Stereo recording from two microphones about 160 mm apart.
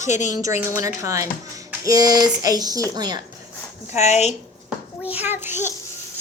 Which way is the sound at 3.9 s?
45° left (ahead or behind).